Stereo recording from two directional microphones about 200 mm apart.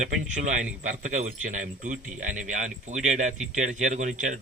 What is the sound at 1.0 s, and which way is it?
A man's voice, 40° right (ahead or behind).